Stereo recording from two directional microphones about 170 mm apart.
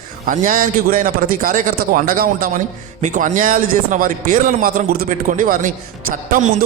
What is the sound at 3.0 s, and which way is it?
A man's voice, 45° right (ahead or behind).